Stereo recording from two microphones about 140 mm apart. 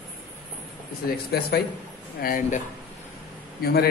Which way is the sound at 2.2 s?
80° left.